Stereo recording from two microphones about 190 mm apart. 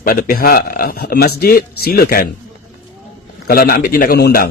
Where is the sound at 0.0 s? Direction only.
50° left (ahead or behind).